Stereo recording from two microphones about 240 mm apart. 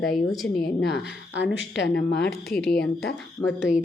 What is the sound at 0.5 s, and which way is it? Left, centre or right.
A woman's voice, left.